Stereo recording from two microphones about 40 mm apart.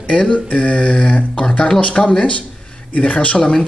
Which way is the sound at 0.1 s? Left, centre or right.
Left.